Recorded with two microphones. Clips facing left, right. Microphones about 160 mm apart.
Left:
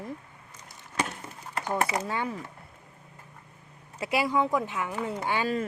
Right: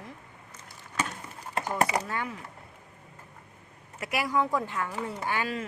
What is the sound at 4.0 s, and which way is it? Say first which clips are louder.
Speech: left 2 dB; 25° left (ahead or behind).